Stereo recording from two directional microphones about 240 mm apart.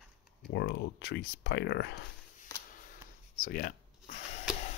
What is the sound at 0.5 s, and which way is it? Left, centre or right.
Speech, left.